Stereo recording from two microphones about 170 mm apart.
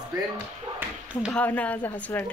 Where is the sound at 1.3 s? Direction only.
10° left (ahead or behind).